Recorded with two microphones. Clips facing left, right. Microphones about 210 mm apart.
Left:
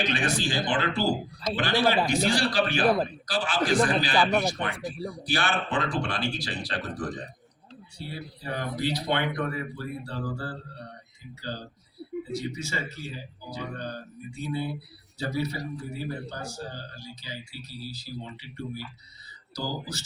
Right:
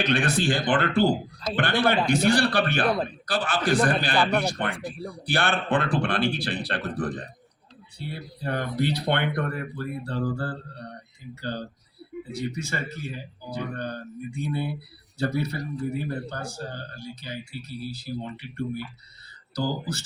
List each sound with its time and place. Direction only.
0.1 s a man's voice: 55° right (ahead or behind)
4.9 s speech: centre (ahead or behind)
5.2 s a man's voice: 55° right (ahead or behind)
15.2 s a man's voice: 55° right (ahead or behind)